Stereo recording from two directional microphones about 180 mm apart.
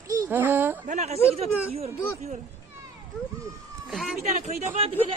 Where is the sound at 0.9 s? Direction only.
40° right (ahead or behind).